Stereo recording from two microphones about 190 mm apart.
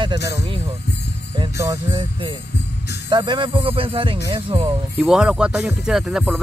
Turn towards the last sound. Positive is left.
turn(degrees=-5)  # may be behind; listen again after turning